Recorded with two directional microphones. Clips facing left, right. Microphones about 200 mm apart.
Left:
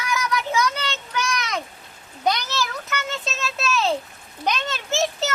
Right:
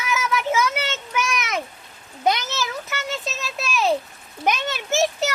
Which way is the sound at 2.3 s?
20° right (ahead or behind).